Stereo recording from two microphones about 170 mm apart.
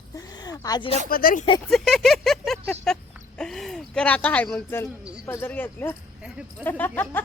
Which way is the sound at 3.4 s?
Centre (ahead or behind).